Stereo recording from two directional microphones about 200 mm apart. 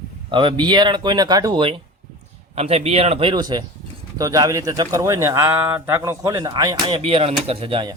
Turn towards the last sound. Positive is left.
turn(degrees=-25)  # may be behind; listen again after turning